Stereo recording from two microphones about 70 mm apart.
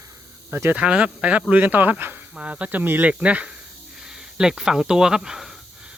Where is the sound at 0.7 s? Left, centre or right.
Centre.